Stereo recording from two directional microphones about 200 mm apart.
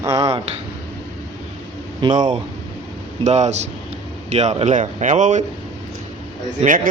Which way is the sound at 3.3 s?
35° right (ahead or behind).